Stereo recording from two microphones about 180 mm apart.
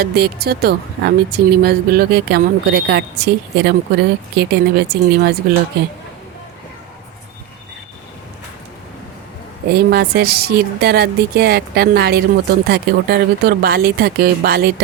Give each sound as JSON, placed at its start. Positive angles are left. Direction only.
{"t": 0.0, "sound": "speech", "side_deg": -60}
{"t": 9.7, "sound": "speech", "side_deg": -65}